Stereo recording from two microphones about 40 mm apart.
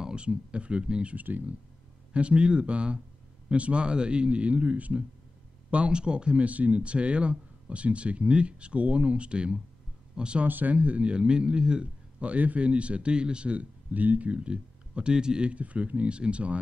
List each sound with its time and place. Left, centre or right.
0.0 s speech: right
1.1 s speech: right
2.1 s a man's voice: right
10.4 s a man's voice: right